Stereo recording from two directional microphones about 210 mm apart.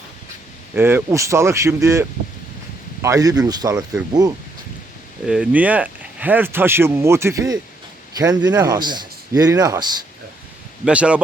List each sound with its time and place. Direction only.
0.7 s speech: 10° right (ahead or behind)
5.2 s speech: 5° right (ahead or behind)
10.8 s speech: 5° right (ahead or behind)